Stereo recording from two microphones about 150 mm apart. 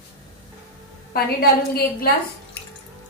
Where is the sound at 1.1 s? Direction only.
85° left.